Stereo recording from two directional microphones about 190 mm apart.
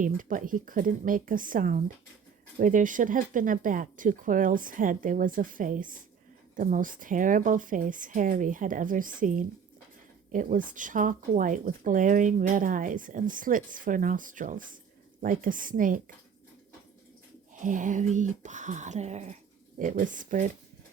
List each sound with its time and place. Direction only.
0.0 s speech: 45° right (ahead or behind)
17.5 s speech: 40° right (ahead or behind)